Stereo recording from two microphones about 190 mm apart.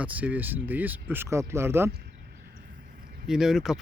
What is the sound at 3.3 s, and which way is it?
Speech, 5° right (ahead or behind).